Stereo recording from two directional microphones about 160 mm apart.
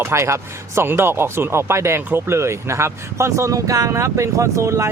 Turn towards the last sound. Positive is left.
turn(degrees=-15)  # may be behind; listen again after turning